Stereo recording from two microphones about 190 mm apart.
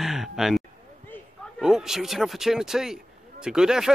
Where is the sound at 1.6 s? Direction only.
5° right (ahead or behind).